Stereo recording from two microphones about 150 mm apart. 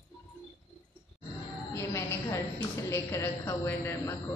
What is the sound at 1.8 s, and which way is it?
A man's voice, 20° left (ahead or behind).